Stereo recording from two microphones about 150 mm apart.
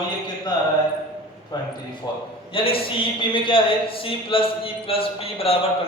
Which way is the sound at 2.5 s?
35° left (ahead or behind).